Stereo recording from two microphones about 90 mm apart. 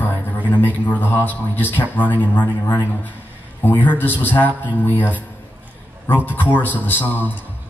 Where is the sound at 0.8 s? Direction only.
20° left (ahead or behind).